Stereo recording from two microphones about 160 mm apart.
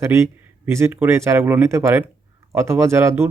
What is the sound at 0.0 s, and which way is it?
Speech, 15° right (ahead or behind).